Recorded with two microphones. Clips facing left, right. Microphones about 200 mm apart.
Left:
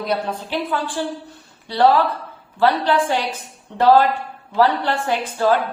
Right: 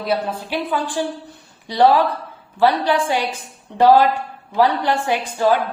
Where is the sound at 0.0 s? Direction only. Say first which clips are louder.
Right 1 dB; 5° right (ahead or behind).